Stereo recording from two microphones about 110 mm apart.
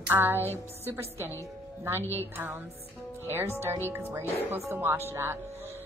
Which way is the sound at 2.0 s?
20° left (ahead or behind).